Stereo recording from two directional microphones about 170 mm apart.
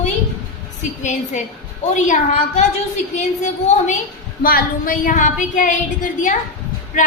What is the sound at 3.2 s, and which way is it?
Speech, 45° left (ahead or behind).